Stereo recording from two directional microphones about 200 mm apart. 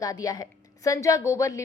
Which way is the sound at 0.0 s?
20° left (ahead or behind).